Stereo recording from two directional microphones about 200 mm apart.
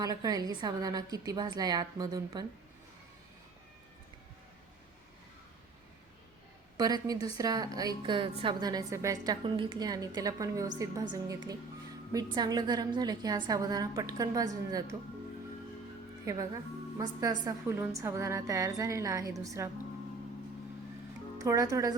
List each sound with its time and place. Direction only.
0.0 s a woman's voice: 20° right (ahead or behind)
6.7 s a woman's voice: 20° right (ahead or behind)
17.0 s a woman's voice: 20° right (ahead or behind)
21.3 s speech: 15° right (ahead or behind)